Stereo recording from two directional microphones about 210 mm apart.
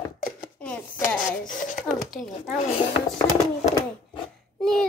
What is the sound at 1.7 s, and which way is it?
Child singing, centre (ahead or behind).